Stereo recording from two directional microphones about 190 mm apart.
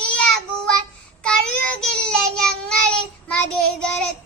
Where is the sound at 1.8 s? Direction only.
5° left (ahead or behind).